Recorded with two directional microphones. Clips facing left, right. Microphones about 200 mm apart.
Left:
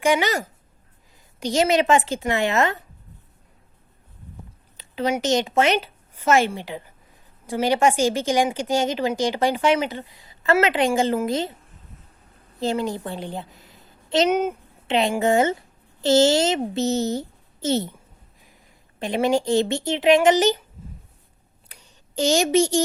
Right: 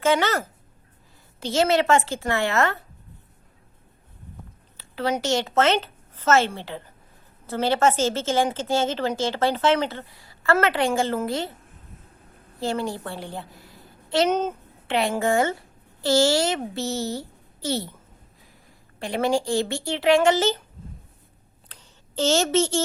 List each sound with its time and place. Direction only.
0.0 s a woman's voice: 15° left (ahead or behind)
4.8 s a woman's voice: 15° left (ahead or behind)
12.5 s a woman's voice: 20° left (ahead or behind)
14.9 s a child's voice: 20° left (ahead or behind)
18.9 s a child's voice: 20° left (ahead or behind)
21.7 s a sound: 15° left (ahead or behind)